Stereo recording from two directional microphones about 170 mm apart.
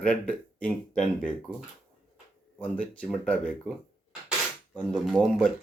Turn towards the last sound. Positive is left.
turn(degrees=0)  # may be behind; listen again after turning